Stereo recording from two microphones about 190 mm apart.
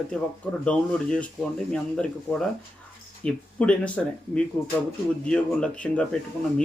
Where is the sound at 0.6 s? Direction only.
5° left (ahead or behind).